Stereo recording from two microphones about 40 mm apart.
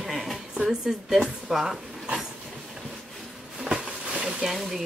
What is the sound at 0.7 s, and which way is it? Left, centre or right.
A woman's voice, centre.